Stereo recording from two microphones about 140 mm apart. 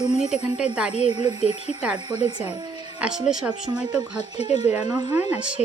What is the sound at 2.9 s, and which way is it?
Speech, 5° right (ahead or behind).